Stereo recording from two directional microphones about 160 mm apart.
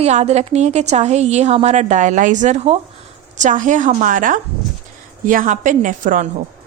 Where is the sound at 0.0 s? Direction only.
45° right (ahead or behind).